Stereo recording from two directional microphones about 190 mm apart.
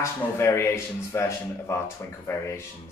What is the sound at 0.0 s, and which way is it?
Speech, 15° left (ahead or behind).